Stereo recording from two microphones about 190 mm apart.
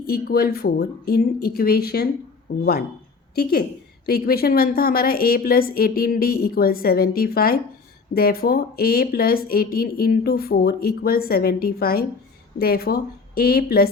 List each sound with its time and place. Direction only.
0.1 s speech: 50° left (ahead or behind)
4.0 s speech: 55° left (ahead or behind)